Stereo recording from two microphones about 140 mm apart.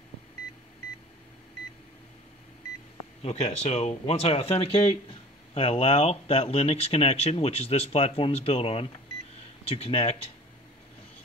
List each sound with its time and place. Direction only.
3.2 s speech: 50° left (ahead or behind)